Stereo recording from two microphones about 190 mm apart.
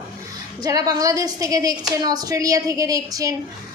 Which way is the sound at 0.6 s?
20° right (ahead or behind).